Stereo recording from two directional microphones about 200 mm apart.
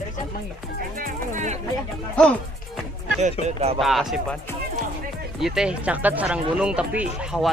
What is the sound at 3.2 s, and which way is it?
Speech, 35° right (ahead or behind).